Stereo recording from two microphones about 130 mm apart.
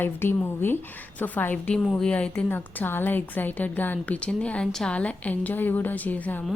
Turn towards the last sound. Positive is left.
turn(degrees=10)  # may be behind; listen again after turning